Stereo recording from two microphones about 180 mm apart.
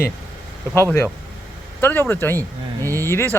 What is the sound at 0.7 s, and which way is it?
Speech, 15° left (ahead or behind).